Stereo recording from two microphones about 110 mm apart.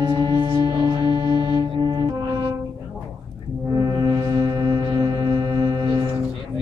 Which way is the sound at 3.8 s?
35° right (ahead or behind).